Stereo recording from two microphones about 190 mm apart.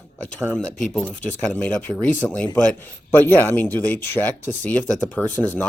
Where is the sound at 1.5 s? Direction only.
5° left (ahead or behind).